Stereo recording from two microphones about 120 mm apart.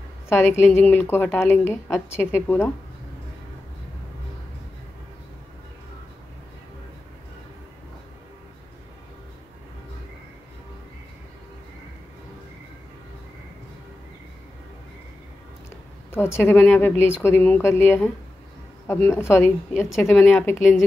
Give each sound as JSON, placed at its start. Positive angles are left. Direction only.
{"t": 0.3, "sound": "a woman's voice", "side_deg": 20}
{"t": 16.1, "sound": "a woman's voice", "side_deg": 20}
{"t": 20.1, "sound": "a woman's voice", "side_deg": 5}